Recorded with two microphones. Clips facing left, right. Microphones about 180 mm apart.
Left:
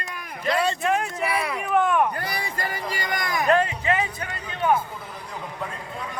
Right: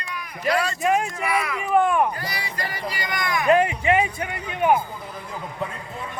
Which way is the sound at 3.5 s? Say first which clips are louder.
Right 3 dB; 15° right (ahead or behind).